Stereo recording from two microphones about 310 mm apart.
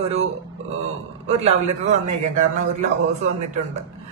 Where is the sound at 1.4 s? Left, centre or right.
Right.